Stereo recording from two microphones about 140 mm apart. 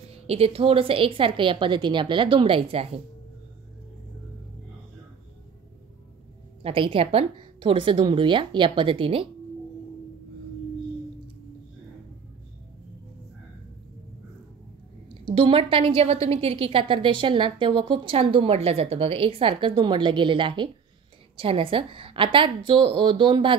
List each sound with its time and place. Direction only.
0.1 s a woman's voice: 45° right (ahead or behind)
6.6 s a woman's voice: 40° right (ahead or behind)
15.4 s a woman's voice: 40° right (ahead or behind)